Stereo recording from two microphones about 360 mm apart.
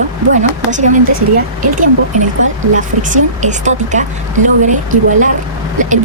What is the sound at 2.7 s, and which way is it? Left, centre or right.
A woman's voice, right.